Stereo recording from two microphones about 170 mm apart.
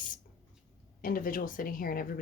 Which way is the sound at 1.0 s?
55° left (ahead or behind).